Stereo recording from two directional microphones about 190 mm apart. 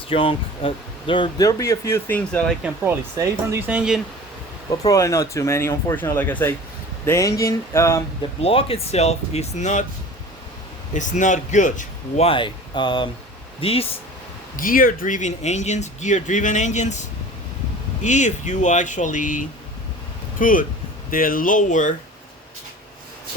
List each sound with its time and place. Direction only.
0.1 s speech: 30° left (ahead or behind); by 2.6 s 5° left (ahead or behind)
2.8 s speech: 10° right (ahead or behind)
4.9 s speech: 15° left (ahead or behind)
8.4 s speech: 30° left (ahead or behind)
10.9 s speech: 40° left (ahead or behind)
14.5 s speech: 45° left (ahead or behind)